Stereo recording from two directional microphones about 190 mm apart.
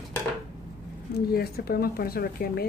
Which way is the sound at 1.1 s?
55° left (ahead or behind).